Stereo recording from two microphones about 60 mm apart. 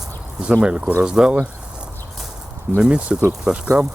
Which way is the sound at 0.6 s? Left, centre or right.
Centre.